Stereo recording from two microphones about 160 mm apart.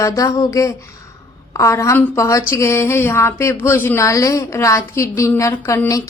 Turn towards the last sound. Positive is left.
turn(degrees=20)  # may be behind; listen again after turning